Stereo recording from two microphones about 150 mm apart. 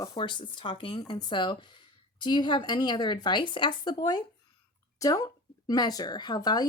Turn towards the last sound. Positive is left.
turn(degrees=25)  # may be behind; listen again after turning